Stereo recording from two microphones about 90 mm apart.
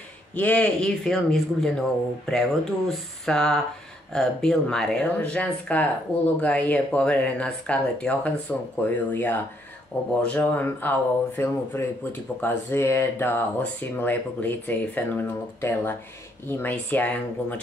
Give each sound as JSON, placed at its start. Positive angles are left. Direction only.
{"t": 0.3, "sound": "speech", "side_deg": 15}